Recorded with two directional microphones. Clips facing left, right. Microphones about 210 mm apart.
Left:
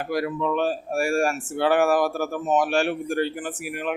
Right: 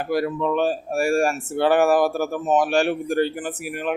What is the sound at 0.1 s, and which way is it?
Speech, 35° right (ahead or behind).